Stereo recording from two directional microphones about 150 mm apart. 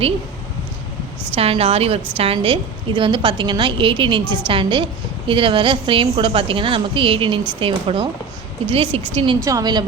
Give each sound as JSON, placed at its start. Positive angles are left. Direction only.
{"t": 1.4, "sound": "a woman's voice", "side_deg": -40}
{"t": 9.4, "sound": "a woman's voice", "side_deg": -25}